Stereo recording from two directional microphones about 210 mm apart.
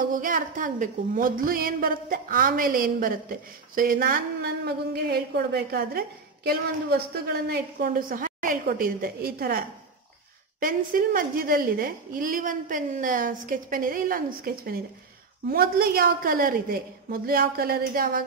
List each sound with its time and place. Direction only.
0.0 s a woman's voice: 40° right (ahead or behind)